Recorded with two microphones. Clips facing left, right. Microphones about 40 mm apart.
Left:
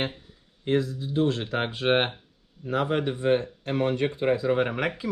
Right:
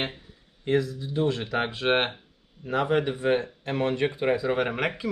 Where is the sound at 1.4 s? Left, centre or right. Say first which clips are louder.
Right 1 dB; right.